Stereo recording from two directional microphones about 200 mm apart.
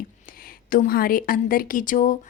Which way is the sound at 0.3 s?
45° left (ahead or behind).